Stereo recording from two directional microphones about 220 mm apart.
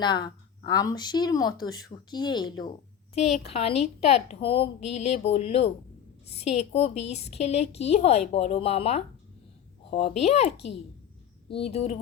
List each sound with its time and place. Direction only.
0.0 s a woman's voice: 20° left (ahead or behind)
3.2 s a woman's voice: 30° left (ahead or behind)
11.6 s a woman's voice: 30° left (ahead or behind)